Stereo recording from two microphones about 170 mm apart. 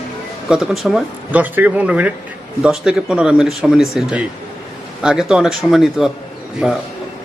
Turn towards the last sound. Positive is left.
turn(degrees=-5)  # may be behind; listen again after turning